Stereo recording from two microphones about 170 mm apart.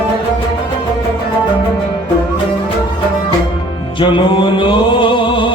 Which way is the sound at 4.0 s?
30° left (ahead or behind).